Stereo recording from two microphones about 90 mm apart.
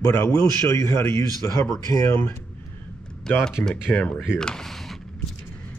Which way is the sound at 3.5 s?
10° left (ahead or behind).